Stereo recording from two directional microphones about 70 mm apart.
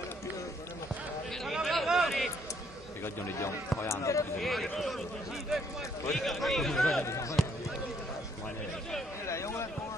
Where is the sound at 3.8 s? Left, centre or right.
Left.